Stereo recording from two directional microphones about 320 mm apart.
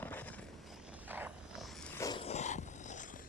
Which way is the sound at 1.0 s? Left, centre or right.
Centre.